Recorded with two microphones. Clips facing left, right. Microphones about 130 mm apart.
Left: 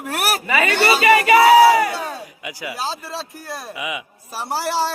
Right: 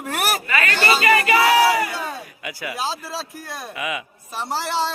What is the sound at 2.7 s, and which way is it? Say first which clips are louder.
Speech: even; centre (ahead or behind).